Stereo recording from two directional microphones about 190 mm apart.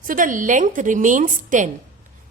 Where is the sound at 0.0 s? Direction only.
45° right (ahead or behind).